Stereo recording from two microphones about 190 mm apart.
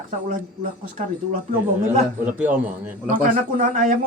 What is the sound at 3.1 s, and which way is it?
Speech, 45° right (ahead or behind).